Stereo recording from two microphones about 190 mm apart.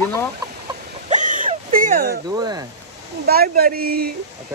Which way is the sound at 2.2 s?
20° right (ahead or behind).